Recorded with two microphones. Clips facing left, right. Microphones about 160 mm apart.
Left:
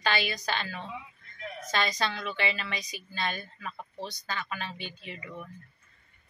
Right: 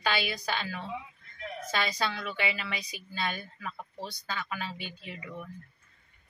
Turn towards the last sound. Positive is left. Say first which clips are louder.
# even
turn(degrees=-5)  # may be behind; listen again after turning